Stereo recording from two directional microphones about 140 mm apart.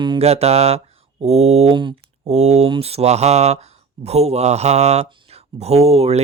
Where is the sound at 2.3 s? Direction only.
50° right (ahead or behind).